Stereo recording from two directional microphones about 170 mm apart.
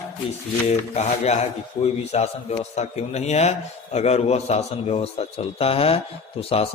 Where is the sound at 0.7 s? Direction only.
40° left (ahead or behind).